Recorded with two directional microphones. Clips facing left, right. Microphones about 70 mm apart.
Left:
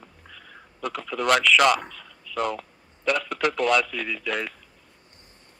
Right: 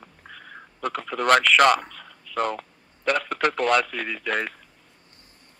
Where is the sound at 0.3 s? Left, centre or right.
Right.